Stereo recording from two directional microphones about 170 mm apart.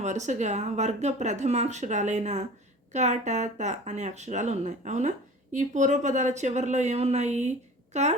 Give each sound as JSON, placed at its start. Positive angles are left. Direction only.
{"t": 0.0, "sound": "a woman's voice", "side_deg": -45}